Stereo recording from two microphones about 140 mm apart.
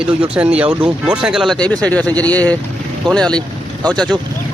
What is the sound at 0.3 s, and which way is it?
Speech, 10° right (ahead or behind).